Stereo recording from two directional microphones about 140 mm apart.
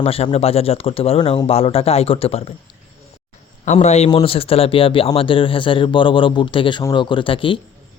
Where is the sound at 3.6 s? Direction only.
55° left (ahead or behind).